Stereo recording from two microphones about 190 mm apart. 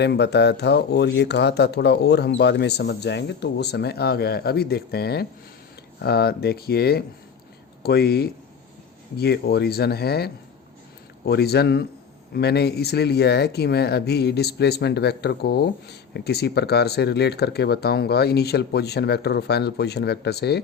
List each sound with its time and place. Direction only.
0.0 s speech: 60° left (ahead or behind)